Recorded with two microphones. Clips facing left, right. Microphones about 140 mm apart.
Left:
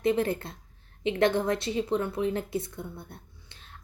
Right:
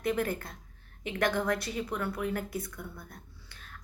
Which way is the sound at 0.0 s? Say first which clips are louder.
Left 5 dB; 25° left (ahead or behind).